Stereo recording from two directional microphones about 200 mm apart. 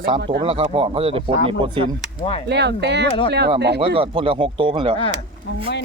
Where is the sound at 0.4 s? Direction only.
30° right (ahead or behind).